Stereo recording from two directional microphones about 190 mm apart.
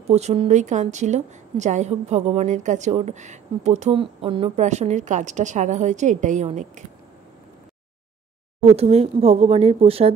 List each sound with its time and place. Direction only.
0.1 s a woman's voice: 35° right (ahead or behind)
8.6 s a woman's voice: 30° right (ahead or behind)